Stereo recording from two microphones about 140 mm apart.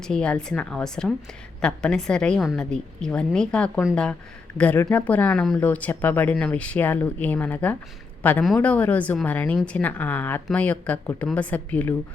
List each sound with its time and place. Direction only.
0.0 s a woman's voice: 5° left (ahead or behind)